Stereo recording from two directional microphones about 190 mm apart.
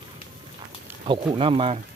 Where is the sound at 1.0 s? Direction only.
25° right (ahead or behind).